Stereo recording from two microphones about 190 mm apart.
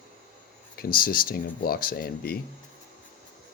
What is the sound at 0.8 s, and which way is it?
Speech, 50° left (ahead or behind).